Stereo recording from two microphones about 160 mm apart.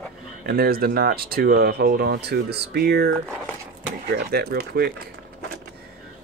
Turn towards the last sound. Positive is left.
turn(degrees=-75)  # may be behind; listen again after turning